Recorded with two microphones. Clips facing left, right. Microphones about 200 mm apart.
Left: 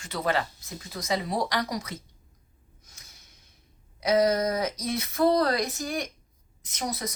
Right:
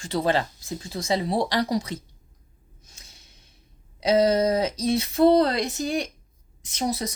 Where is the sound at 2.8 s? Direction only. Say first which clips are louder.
Right 3 dB; 30° right (ahead or behind).